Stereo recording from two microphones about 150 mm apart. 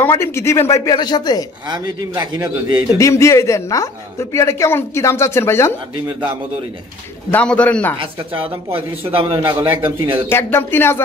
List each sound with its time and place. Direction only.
0.0 s a woman's voice: 15° left (ahead or behind)
1.7 s a man's voice: 25° right (ahead or behind)
3.0 s a woman's voice: 20° left (ahead or behind)
7.2 s a woman's voice: 10° left (ahead or behind)
8.0 s speech: 35° right (ahead or behind)
9.4 s a man's voice: 15° right (ahead or behind)
10.2 s a woman's voice: 15° left (ahead or behind)